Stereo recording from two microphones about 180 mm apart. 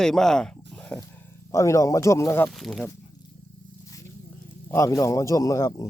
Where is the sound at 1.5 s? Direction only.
15° left (ahead or behind).